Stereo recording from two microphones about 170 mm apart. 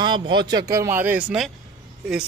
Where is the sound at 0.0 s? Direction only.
25° right (ahead or behind).